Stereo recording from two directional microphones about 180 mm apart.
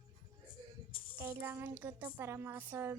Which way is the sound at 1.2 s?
10° right (ahead or behind).